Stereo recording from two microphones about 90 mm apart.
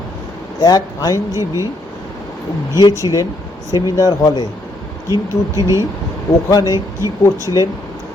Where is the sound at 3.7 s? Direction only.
45° left (ahead or behind).